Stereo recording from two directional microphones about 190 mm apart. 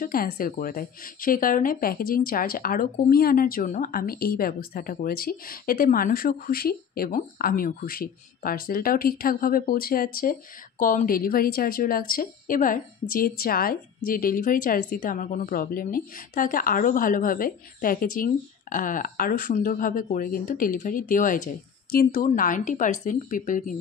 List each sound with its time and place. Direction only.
0.0 s a woman's voice: 50° left (ahead or behind)